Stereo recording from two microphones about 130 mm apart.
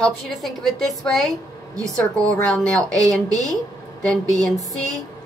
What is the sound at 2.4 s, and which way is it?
Speech, 5° left (ahead or behind).